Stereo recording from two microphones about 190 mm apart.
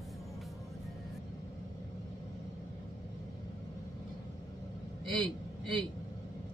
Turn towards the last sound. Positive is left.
turn(degrees=-25)  # may be behind; listen again after turning